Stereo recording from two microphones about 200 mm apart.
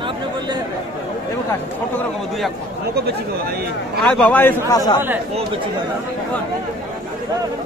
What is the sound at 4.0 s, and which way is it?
Speech, 5° left (ahead or behind).